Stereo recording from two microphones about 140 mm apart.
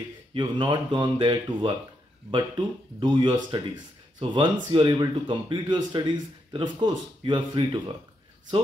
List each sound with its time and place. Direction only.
0.3 s speech: 35° right (ahead or behind)